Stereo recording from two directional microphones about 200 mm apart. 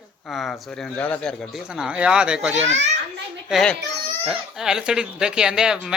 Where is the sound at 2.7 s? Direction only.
35° right (ahead or behind).